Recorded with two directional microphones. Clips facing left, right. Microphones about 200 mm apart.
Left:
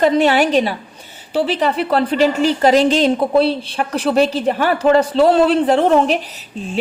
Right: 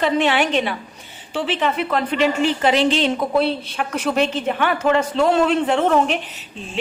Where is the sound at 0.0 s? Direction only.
40° left (ahead or behind).